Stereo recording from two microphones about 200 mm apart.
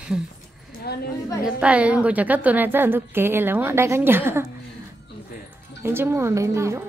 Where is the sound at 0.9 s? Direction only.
50° left (ahead or behind).